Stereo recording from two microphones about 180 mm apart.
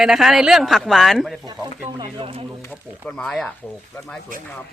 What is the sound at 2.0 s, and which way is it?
Speech, 30° right (ahead or behind).